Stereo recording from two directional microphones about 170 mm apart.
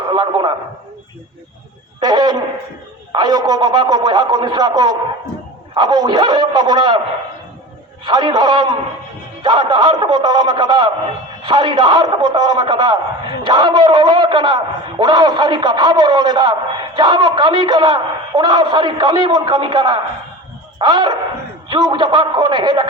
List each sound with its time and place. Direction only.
0.1 s radio: 25° right (ahead or behind)
2.0 s a sound: 25° right (ahead or behind)
3.1 s a man's voice: 25° right (ahead or behind)
8.0 s a man's voice: 25° right (ahead or behind)